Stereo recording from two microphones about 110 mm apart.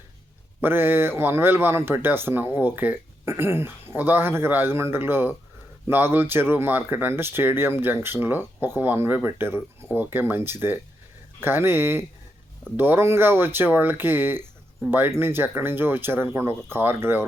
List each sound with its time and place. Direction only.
0.6 s a man's voice: 20° right (ahead or behind)